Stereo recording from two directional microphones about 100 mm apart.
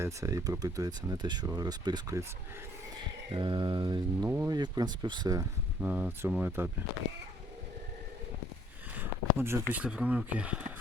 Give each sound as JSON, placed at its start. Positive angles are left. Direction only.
{"t": 0.0, "sound": "speech", "side_deg": -30}
{"t": 3.3, "sound": "speech", "side_deg": -50}
{"t": 4.2, "sound": "speech", "side_deg": -25}
{"t": 4.4, "sound": "speech", "side_deg": -40}
{"t": 5.8, "sound": "speech", "side_deg": -15}
{"t": 9.0, "sound": "a sound", "side_deg": -25}
{"t": 9.7, "sound": "speech", "side_deg": -10}